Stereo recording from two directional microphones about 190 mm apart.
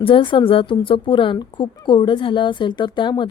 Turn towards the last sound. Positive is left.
turn(degrees=25)  # may be behind; listen again after turning